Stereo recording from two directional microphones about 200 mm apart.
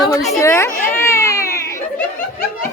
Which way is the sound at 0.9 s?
15° left (ahead or behind).